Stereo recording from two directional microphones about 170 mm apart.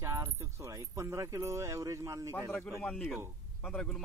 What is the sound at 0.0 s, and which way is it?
Speech, 15° right (ahead or behind).